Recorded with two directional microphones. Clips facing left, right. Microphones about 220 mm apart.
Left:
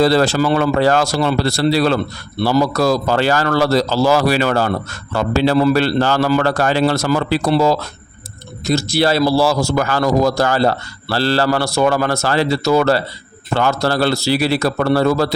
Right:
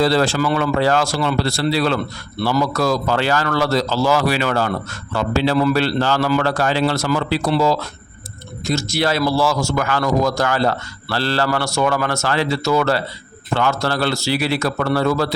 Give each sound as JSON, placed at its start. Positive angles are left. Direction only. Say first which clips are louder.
{"t": 0.0, "sound": "a man's voice", "louder": "left 3 dB", "side_deg": 40}
{"t": 8.6, "sound": "a man's voice", "louder": "left 4 dB", "side_deg": 35}